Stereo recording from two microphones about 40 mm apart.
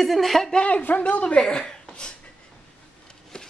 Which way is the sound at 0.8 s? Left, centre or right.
Left.